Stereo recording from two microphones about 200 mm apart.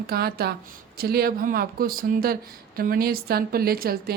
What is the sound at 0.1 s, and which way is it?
Speech, 50° right (ahead or behind).